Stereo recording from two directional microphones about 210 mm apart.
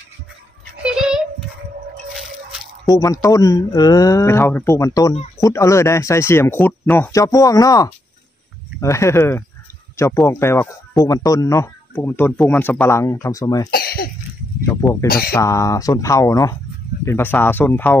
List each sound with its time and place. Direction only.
0.8 s child singing: 5° right (ahead or behind)
3.0 s speech: 15° left (ahead or behind)
13.7 s cough: 45° left (ahead or behind)
15.0 s speech: 45° left (ahead or behind)
15.3 s speech: 15° left (ahead or behind)